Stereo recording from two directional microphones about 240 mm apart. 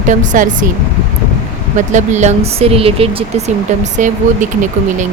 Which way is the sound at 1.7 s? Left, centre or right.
Right.